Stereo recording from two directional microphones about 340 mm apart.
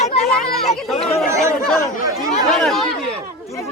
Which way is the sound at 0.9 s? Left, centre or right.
Centre.